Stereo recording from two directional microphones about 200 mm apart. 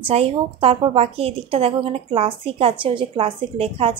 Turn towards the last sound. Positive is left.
turn(degrees=-25)  # may be behind; listen again after turning